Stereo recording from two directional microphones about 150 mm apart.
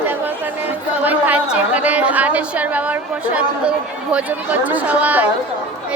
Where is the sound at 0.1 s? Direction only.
10° right (ahead or behind).